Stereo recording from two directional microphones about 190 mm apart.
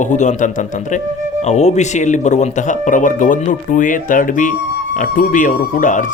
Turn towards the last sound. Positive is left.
turn(degrees=45)  # may be behind; listen again after turning